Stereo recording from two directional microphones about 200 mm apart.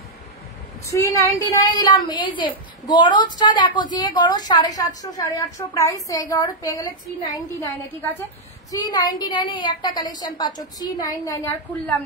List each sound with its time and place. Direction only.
0.8 s a woman's voice: 15° left (ahead or behind)
8.7 s a woman's voice: 20° left (ahead or behind)